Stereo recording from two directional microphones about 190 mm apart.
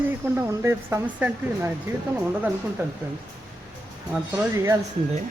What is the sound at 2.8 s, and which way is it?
Speech, 15° right (ahead or behind).